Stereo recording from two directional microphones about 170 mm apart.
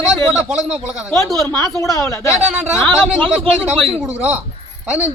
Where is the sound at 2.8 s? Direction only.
5° right (ahead or behind).